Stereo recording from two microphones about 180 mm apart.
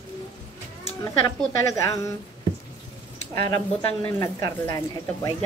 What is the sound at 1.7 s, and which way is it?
Speech, 15° left (ahead or behind).